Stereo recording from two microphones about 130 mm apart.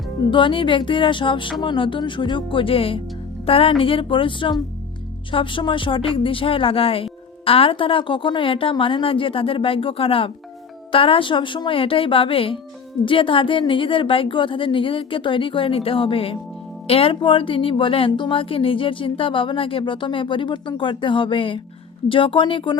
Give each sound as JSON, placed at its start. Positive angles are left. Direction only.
{"t": 0.3, "sound": "a woman's voice", "side_deg": 40}